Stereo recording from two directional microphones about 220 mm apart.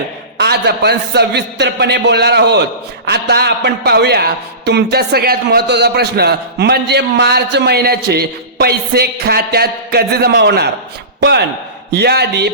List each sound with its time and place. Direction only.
0.3 s a man's voice: 50° right (ahead or behind)